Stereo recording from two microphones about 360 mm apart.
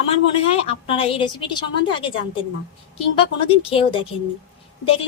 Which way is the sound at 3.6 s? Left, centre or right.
Centre.